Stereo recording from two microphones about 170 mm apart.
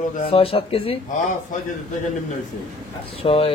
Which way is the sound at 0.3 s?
35° left (ahead or behind).